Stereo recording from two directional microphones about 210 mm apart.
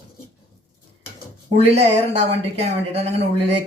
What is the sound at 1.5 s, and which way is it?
Speech, 30° right (ahead or behind).